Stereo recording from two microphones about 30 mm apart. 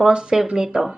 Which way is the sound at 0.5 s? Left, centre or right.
Centre.